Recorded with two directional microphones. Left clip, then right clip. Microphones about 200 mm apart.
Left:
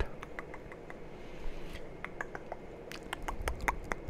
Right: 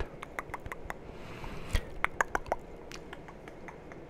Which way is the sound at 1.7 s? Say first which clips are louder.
Right 12 dB; 50° right (ahead or behind).